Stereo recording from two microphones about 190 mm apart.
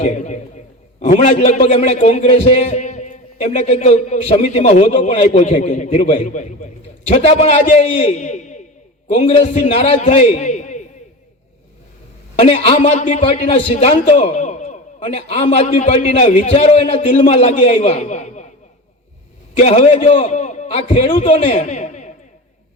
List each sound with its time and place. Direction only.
0.0 s a man's voice: 35° left (ahead or behind)
12.4 s a man's voice: 30° left (ahead or behind)
19.5 s a man's voice: 35° left (ahead or behind)